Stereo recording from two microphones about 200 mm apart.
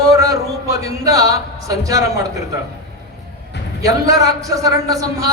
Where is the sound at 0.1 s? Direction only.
15° right (ahead or behind).